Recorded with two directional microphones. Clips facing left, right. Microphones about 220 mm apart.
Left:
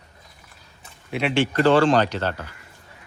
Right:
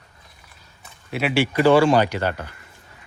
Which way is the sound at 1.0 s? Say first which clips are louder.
Even; 5° right (ahead or behind).